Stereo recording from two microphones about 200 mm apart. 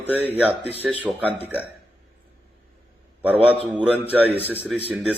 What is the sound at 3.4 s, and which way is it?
Speech, 5° right (ahead or behind).